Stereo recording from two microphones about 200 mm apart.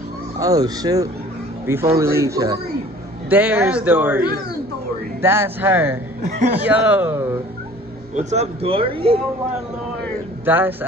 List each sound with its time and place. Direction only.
0.4 s speech: 20° right (ahead or behind)
5.2 s speech: 10° right (ahead or behind)
8.1 s speech: 35° right (ahead or behind)
10.4 s speech: 10° right (ahead or behind)